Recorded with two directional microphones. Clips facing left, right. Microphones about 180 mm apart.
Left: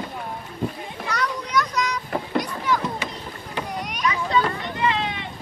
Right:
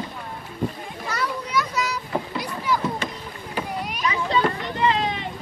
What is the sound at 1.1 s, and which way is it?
Children playing, 5° right (ahead or behind).